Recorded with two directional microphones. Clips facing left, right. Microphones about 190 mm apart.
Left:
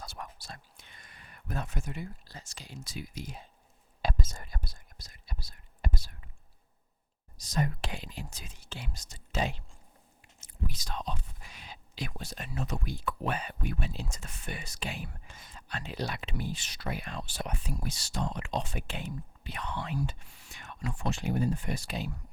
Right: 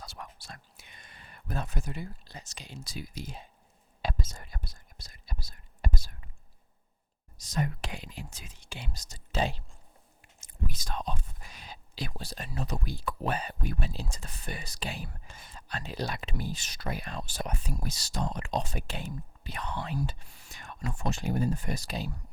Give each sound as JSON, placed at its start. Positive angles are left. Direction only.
{"t": 0.0, "sound": "whispering", "side_deg": 50}
{"t": 0.8, "sound": "a sound", "side_deg": -20}
{"t": 2.2, "sound": "speech", "side_deg": -20}
{"t": 2.8, "sound": "speech", "side_deg": -35}
{"t": 4.0, "sound": "whispering", "side_deg": 45}
{"t": 4.9, "sound": "whispering", "side_deg": -35}
{"t": 7.3, "sound": "speech", "side_deg": 35}
{"t": 8.8, "sound": "speech", "side_deg": -40}
{"t": 10.2, "sound": "speech", "side_deg": -50}